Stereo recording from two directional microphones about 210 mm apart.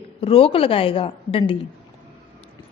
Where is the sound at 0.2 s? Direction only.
25° left (ahead or behind).